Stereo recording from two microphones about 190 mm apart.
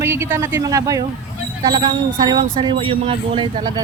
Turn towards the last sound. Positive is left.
turn(degrees=-25)  # may be behind; listen again after turning